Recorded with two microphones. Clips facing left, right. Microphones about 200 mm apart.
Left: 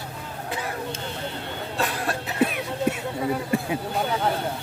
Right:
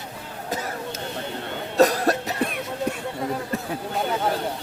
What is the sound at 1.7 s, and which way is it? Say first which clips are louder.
Cough: right 10 dB; 40° right (ahead or behind).